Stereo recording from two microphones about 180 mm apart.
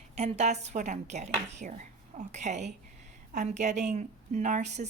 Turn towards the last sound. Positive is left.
turn(degrees=-40)  # may be behind; listen again after turning